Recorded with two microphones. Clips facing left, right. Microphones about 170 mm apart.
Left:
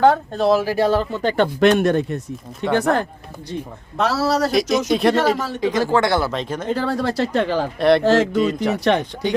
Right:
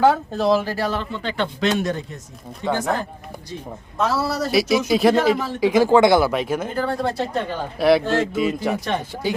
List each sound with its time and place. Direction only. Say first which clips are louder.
0.0 s speech: left 2 dB; 5° right (ahead or behind)
0.8 s speech: left 7 dB; 30° left (ahead or behind); by 3.1 s 65° left (ahead or behind)
3.9 s a man's voice: left 3 dB; 75° left (ahead or behind)
4.9 s speech: right 2 dB; centre (ahead or behind)
6.7 s speech: left 3 dB; 90° left
7.8 s speech: even; 5° right (ahead or behind)
8.0 s a man's voice: left 5 dB; 90° left
8.4 s speech: left 2 dB; 5° right (ahead or behind)
8.8 s a man's voice: left 7 dB; 80° left